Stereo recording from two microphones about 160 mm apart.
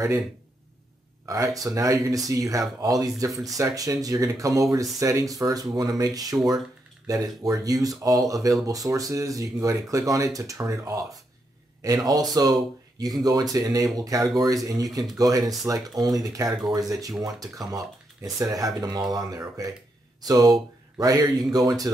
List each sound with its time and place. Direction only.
1.2 s speech: 20° right (ahead or behind)
16.4 s speech: centre (ahead or behind)
16.7 s speech: 20° right (ahead or behind)